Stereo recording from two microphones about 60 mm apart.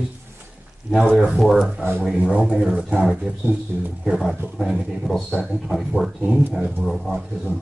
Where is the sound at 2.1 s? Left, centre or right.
Centre.